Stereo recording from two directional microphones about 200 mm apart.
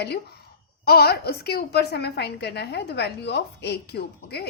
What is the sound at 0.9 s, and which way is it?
A woman's voice, 50° left (ahead or behind).